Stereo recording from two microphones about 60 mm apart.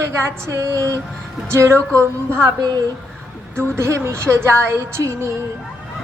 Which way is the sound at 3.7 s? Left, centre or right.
Right.